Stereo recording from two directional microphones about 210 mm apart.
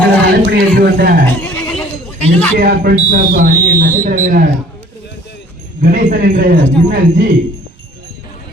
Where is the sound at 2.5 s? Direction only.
50° right (ahead or behind).